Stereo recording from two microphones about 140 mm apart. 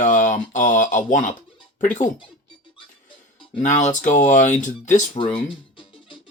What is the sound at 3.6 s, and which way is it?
Speech, 60° left (ahead or behind).